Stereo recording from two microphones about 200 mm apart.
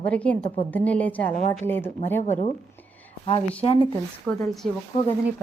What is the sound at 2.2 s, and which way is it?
Speech, 35° left (ahead or behind).